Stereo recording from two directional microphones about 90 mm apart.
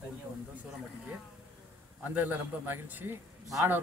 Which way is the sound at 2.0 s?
20° right (ahead or behind).